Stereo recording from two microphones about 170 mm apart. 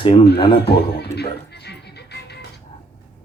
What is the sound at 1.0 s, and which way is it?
Music, 75° left (ahead or behind).